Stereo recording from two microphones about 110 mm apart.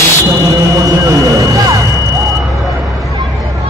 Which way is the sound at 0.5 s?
30° right (ahead or behind).